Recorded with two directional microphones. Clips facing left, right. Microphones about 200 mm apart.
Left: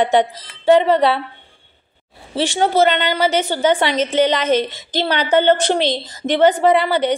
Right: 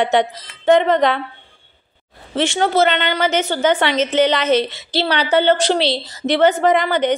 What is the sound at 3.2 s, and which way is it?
Speech, 10° left (ahead or behind).